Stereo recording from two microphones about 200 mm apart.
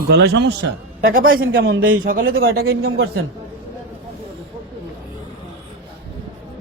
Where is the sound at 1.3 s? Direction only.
85° right.